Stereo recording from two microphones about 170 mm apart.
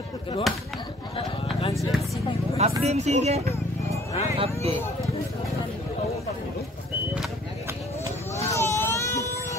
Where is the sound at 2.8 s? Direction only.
40° right (ahead or behind).